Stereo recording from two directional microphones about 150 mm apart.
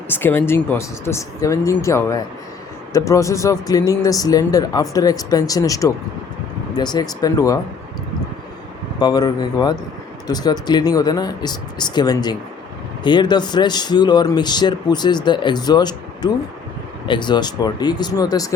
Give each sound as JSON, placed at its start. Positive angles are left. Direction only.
{"t": 0.1, "sound": "speech", "side_deg": 15}
{"t": 9.0, "sound": "speech", "side_deg": 25}